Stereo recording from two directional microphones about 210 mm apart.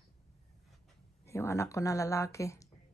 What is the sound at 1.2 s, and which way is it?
A woman's voice, 15° left (ahead or behind).